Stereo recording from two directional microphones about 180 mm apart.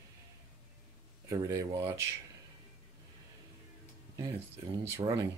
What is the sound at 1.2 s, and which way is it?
Speech, 15° right (ahead or behind).